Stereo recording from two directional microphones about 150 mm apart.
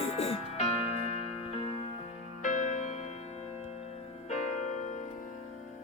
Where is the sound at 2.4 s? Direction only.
50° left (ahead or behind).